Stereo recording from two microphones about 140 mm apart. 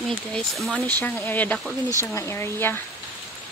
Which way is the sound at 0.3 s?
5° left (ahead or behind).